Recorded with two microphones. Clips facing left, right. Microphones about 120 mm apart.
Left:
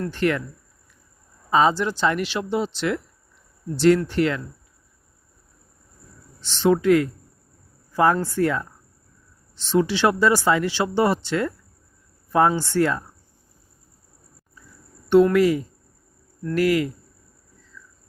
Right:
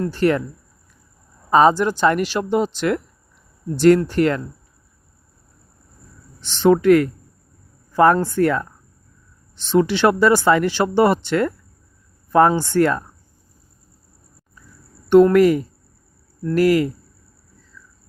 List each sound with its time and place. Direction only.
0.1 s speech: 35° right (ahead or behind)
1.5 s speech: 50° right (ahead or behind)
6.6 s speech: 55° right (ahead or behind)
9.7 s speech: 60° right (ahead or behind)
15.1 s speech: 50° right (ahead or behind)
16.4 s speech: 35° right (ahead or behind)
17.7 s a sound: 35° right (ahead or behind)